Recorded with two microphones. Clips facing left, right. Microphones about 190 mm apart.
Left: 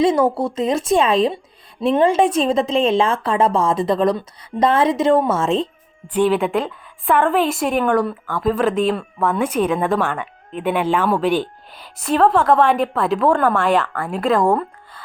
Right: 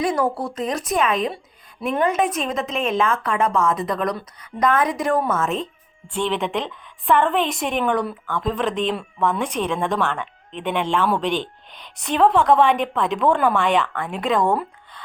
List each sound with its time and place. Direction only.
0.0 s a woman's voice: 25° left (ahead or behind)
6.1 s a woman's voice: 5° left (ahead or behind)